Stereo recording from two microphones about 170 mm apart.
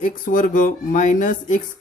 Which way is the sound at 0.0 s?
50° left (ahead or behind).